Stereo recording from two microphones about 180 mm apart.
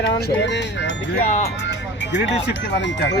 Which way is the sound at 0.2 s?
80° left.